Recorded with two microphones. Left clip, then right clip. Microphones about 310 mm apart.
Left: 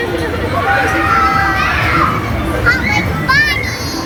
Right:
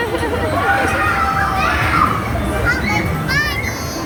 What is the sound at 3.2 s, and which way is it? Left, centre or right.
Children playing, centre.